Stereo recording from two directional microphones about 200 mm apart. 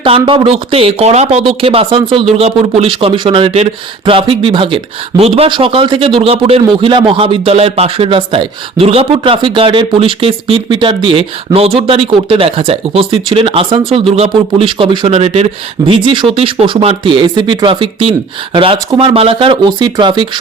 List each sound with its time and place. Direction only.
0.0 s speech: 25° right (ahead or behind)